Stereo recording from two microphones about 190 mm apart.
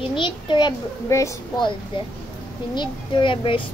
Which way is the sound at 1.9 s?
25° left (ahead or behind).